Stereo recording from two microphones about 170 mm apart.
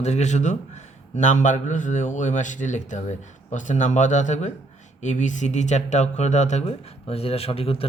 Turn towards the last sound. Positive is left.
turn(degrees=35)  # may be behind; listen again after turning